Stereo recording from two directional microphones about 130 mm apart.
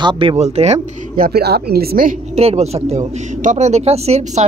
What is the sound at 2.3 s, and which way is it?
Speech, 55° right (ahead or behind).